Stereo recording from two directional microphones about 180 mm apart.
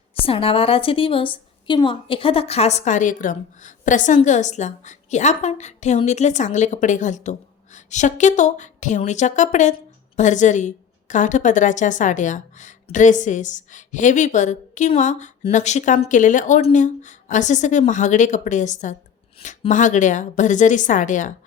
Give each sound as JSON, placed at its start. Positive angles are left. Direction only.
{"t": 0.1, "sound": "a woman's voice", "side_deg": 30}